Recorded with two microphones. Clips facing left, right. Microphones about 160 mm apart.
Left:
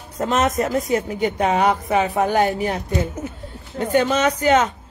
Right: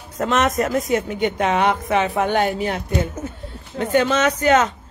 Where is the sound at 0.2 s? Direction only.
30° left (ahead or behind).